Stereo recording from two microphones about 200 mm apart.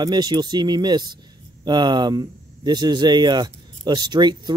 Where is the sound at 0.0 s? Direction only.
20° right (ahead or behind).